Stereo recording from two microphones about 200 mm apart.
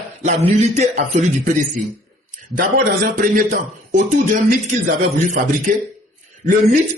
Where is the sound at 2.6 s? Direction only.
45° right (ahead or behind).